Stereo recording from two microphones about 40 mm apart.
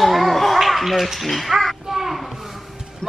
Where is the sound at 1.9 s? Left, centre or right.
Centre.